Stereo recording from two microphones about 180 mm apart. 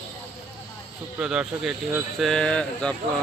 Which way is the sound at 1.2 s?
5° right (ahead or behind).